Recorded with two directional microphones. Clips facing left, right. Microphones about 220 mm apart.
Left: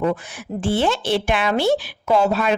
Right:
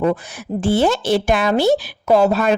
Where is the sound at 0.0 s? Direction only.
40° right (ahead or behind).